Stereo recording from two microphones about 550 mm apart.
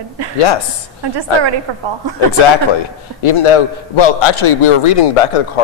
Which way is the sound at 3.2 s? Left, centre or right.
Left.